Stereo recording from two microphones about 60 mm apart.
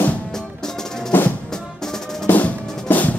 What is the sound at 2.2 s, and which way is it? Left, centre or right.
Drum, left.